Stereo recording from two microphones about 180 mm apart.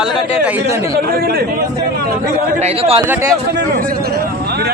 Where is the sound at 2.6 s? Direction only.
35° right (ahead or behind).